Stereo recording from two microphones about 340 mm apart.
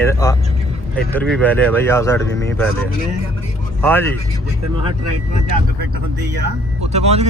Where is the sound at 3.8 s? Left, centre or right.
Centre.